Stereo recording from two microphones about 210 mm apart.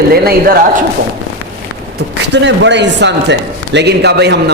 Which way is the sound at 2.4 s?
55° right (ahead or behind).